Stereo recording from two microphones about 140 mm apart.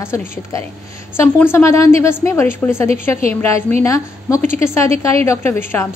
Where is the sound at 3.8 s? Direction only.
20° left (ahead or behind).